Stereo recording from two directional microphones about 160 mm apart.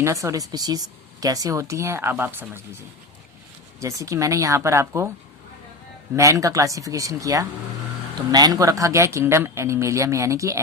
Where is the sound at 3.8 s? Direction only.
20° right (ahead or behind).